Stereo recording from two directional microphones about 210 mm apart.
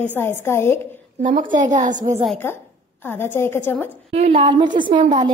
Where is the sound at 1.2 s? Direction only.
40° right (ahead or behind).